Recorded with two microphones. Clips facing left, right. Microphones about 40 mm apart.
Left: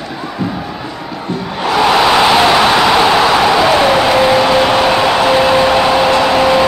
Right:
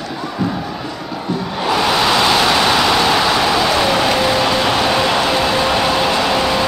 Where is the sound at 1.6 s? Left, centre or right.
Centre.